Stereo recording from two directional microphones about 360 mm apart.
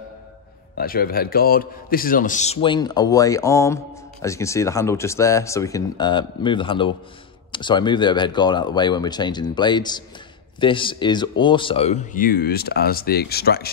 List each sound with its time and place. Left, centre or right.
0.7 s a man's voice: left